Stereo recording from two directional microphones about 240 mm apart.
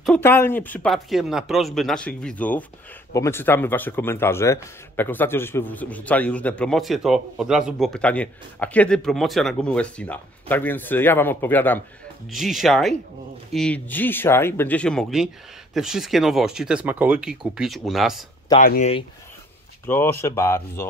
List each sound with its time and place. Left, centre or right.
0.0 s speech: centre
18.6 s speech: left
19.9 s speech: centre